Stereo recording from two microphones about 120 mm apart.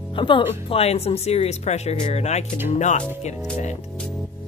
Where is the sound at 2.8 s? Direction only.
85° left.